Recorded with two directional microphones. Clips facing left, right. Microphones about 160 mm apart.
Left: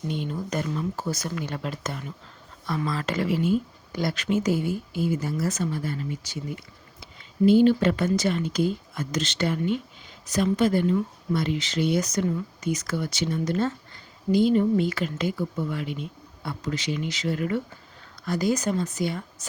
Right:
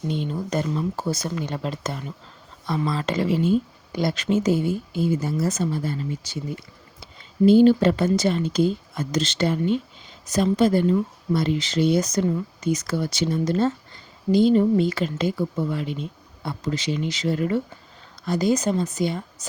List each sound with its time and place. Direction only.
0.1 s speech: 30° right (ahead or behind)